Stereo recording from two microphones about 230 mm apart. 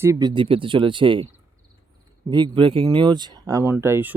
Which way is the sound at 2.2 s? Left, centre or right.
Centre.